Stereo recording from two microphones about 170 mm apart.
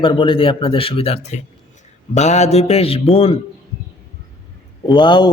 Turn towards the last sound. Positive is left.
turn(degrees=25)  # may be behind; listen again after turning